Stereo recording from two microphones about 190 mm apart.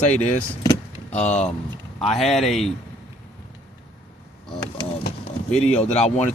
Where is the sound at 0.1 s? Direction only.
40° left (ahead or behind).